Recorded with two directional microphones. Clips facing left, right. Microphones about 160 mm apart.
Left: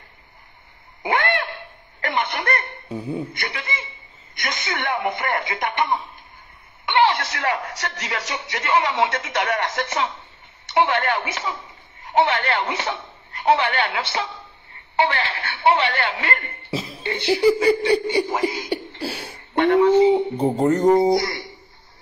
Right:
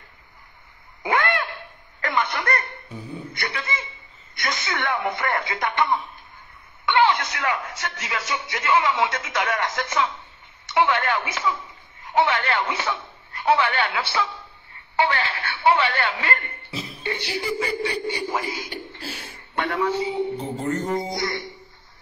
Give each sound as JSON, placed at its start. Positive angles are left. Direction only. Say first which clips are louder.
{"t": 1.0, "sound": "a sound", "louder": "left 1 dB", "side_deg": 20}
{"t": 2.0, "sound": "cough", "louder": "even", "side_deg": 25}
{"t": 4.4, "sound": "a man's voice", "louder": "even", "side_deg": 25}